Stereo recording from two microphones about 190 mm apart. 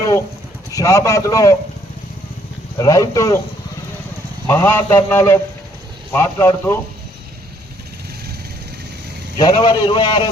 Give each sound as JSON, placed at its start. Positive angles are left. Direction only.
{"t": 0.7, "sound": "a man's voice", "side_deg": 15}
{"t": 2.7, "sound": "a man's voice", "side_deg": 15}
{"t": 4.4, "sound": "a man's voice", "side_deg": 15}
{"t": 9.4, "sound": "a man's voice", "side_deg": 25}